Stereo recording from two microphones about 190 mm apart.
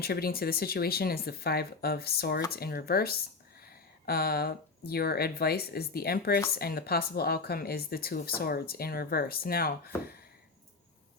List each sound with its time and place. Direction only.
0.0 s speech: 55° left (ahead or behind)
3.7 s a sound: 55° left (ahead or behind)
4.9 s speech: 55° left (ahead or behind)